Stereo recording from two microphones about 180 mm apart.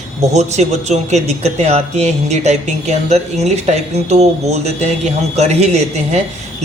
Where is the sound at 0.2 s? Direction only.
40° right (ahead or behind).